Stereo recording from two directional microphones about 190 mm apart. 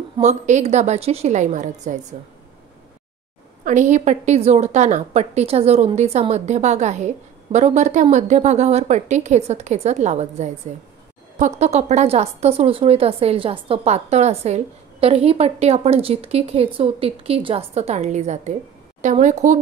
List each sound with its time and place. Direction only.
0.2 s a woman's voice: 35° right (ahead or behind)
3.6 s a woman's voice: 40° right (ahead or behind)